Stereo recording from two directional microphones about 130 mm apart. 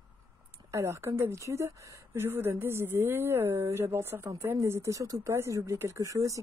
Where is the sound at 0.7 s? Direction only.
20° right (ahead or behind).